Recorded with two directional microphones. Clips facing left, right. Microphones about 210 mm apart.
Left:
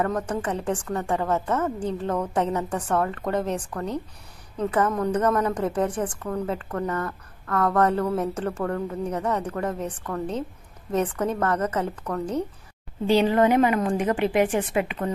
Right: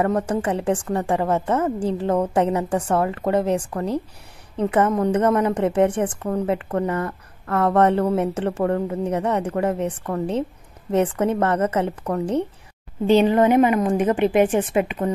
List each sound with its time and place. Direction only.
0.0 s a woman's voice: 30° right (ahead or behind)